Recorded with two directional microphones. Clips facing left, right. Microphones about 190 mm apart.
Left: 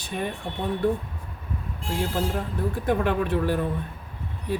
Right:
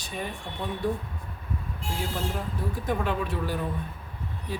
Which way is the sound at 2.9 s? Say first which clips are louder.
Left 5 dB; 60° left (ahead or behind).